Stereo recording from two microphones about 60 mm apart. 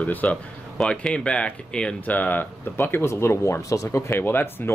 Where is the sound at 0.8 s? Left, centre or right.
Centre.